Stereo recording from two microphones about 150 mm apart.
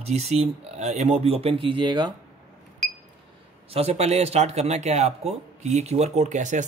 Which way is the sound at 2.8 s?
5° left (ahead or behind).